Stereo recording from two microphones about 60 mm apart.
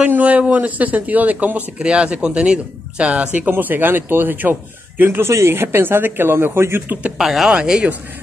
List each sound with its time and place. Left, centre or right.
0.1 s speech: right
6.9 s speech: right
7.2 s speech: centre